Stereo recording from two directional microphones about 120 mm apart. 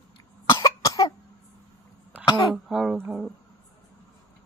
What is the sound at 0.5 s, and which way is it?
Cough, 30° left (ahead or behind).